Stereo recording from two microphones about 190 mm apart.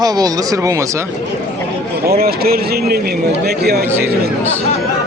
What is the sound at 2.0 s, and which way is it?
Speech, 55° right (ahead or behind).